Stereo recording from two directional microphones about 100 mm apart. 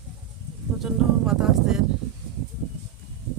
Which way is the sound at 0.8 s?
5° right (ahead or behind).